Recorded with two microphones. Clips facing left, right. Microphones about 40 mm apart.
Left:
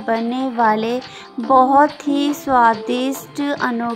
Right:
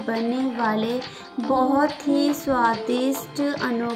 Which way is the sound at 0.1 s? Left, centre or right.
Left.